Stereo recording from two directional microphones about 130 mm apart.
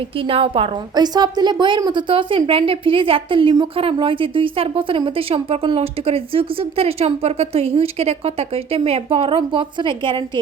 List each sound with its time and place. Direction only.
0.2 s a woman's voice: 45° right (ahead or behind)